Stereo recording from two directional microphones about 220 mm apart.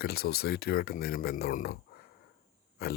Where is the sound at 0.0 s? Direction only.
45° left (ahead or behind).